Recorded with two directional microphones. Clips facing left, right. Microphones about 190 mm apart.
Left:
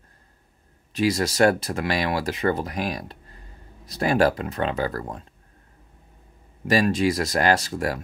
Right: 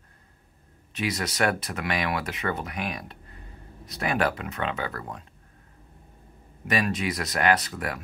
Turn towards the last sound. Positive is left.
turn(degrees=30)  # may be behind; listen again after turning